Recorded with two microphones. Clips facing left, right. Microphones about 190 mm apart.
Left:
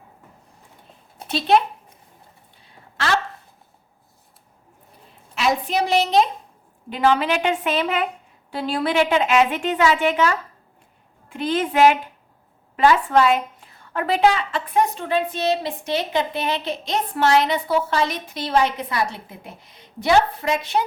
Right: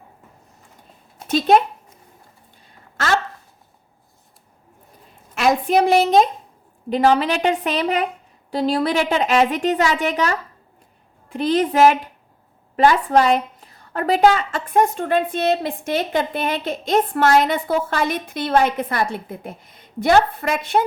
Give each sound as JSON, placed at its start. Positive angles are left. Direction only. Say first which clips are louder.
{"t": 1.3, "sound": "a woman's voice", "louder": "right 3 dB", "side_deg": -45}
{"t": 2.6, "sound": "a sound", "louder": "right 2 dB", "side_deg": -45}
{"t": 5.3, "sound": "a woman's voice", "louder": "right 5 dB", "side_deg": -50}
{"t": 6.9, "sound": "a woman's voice", "louder": "right 2 dB", "side_deg": -40}